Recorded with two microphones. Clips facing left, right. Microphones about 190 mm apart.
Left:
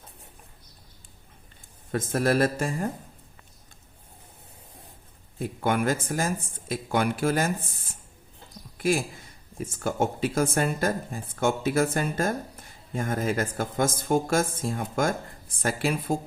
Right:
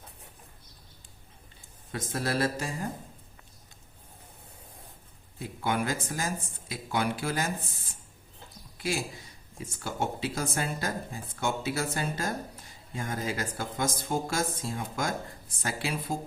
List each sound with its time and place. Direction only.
1.9 s speech: 50° left (ahead or behind)
5.4 s speech: 50° left (ahead or behind)
8.8 s a man's voice: 55° left (ahead or behind)